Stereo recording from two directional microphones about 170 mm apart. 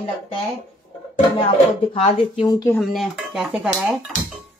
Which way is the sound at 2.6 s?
5° left (ahead or behind).